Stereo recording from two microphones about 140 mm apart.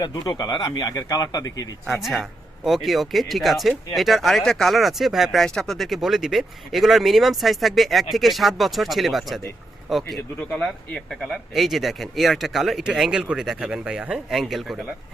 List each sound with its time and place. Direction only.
0.0 s speech: 30° left (ahead or behind)
1.9 s speech: centre (ahead or behind)